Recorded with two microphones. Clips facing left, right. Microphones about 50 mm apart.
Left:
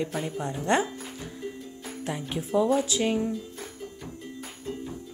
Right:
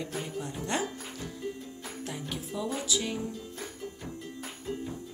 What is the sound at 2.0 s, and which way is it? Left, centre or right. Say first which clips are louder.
Speech: left 6 dB; left.